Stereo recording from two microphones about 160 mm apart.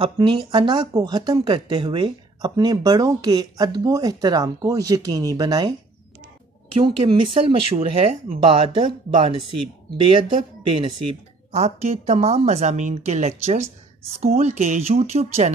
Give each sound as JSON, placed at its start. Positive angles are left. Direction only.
{"t": 0.0, "sound": "speech", "side_deg": -30}
{"t": 6.8, "sound": "speech", "side_deg": -35}